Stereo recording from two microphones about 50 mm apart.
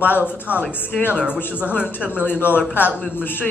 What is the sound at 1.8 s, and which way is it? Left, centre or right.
Speech, left.